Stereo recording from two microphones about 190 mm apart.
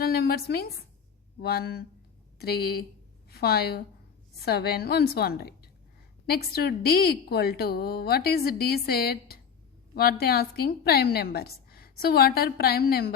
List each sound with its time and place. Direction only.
0.0 s a woman's voice: 55° left (ahead or behind)